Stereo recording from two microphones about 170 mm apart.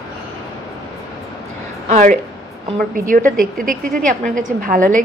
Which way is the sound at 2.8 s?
55° right (ahead or behind).